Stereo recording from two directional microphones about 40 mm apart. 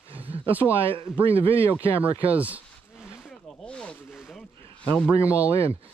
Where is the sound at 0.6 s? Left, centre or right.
Left.